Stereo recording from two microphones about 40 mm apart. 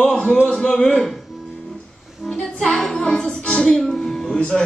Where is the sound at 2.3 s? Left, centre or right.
Centre; by 3.7 s left.